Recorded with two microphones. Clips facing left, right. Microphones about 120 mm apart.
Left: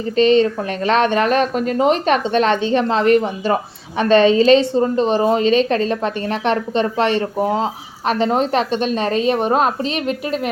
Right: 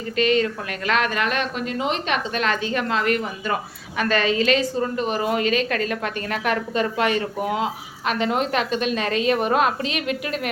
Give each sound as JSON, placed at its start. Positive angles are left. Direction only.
{"t": 0.0, "sound": "speech", "side_deg": 25}